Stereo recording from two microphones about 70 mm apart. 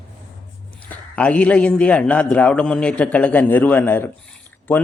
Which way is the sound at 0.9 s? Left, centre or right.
Left.